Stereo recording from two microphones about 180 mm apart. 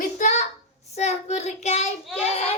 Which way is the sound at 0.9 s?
40° left (ahead or behind).